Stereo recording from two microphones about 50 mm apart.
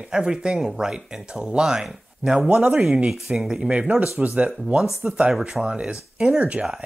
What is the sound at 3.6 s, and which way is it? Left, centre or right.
Speech, right.